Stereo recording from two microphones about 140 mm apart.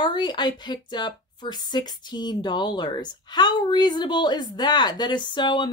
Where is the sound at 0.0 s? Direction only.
30° left (ahead or behind).